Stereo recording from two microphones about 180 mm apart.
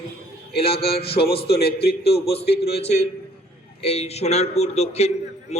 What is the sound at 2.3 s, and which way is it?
Speech, 35° left (ahead or behind).